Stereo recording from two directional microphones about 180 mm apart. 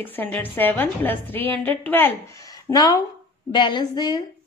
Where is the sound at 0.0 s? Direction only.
10° left (ahead or behind).